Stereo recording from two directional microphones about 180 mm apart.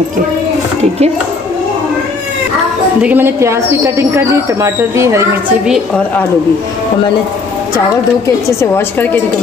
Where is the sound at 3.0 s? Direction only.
10° right (ahead or behind).